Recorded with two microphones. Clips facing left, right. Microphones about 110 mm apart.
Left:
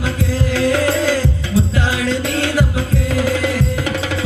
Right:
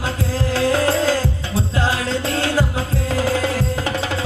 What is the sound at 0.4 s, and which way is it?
Music, 25° right (ahead or behind).